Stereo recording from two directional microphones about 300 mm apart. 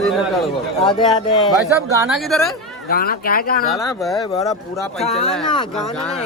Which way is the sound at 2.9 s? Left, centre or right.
Left.